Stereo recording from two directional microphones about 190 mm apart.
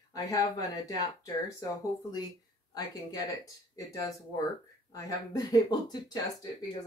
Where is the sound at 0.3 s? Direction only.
15° left (ahead or behind).